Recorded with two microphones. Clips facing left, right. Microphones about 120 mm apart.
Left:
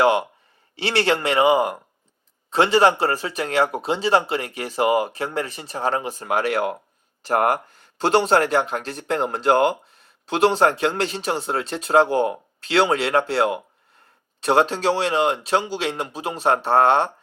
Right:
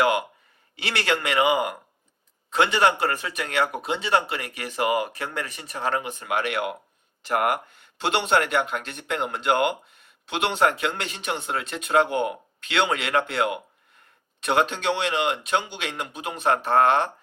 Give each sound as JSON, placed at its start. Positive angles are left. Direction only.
{"t": 0.0, "sound": "speech", "side_deg": 30}